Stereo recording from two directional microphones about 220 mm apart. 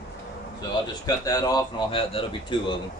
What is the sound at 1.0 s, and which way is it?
Speech, 15° left (ahead or behind).